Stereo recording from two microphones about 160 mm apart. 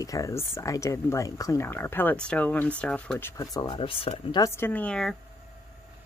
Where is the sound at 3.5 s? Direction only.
25° left (ahead or behind).